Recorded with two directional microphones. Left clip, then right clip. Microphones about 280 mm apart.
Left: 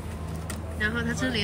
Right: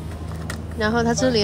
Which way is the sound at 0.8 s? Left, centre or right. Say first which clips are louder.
Right 7 dB; centre.